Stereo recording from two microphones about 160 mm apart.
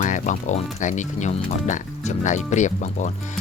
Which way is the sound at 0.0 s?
50° left (ahead or behind).